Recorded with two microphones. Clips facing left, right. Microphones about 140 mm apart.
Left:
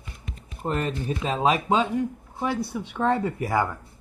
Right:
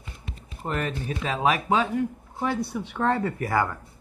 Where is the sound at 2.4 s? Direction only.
10° left (ahead or behind).